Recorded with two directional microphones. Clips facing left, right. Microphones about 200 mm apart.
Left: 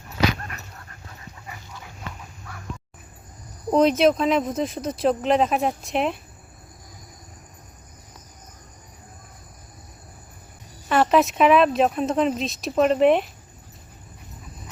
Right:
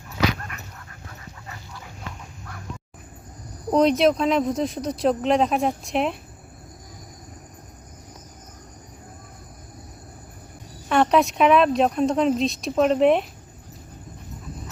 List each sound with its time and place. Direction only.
0.5 s dog: 35° left (ahead or behind)
3.7 s speech: centre (ahead or behind)
10.8 s speech: centre (ahead or behind)